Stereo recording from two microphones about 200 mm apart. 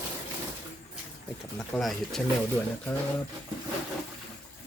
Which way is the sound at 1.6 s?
Centre (ahead or behind).